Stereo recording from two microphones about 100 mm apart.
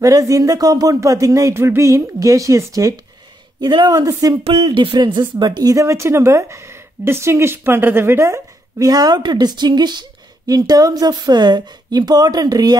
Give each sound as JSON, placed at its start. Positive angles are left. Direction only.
{"t": 0.0, "sound": "speech", "side_deg": -35}
{"t": 3.6, "sound": "a woman's voice", "side_deg": -45}
{"t": 4.5, "sound": "speech", "side_deg": -65}
{"t": 5.6, "sound": "a woman's voice", "side_deg": -35}
{"t": 8.8, "sound": "a woman's voice", "side_deg": -40}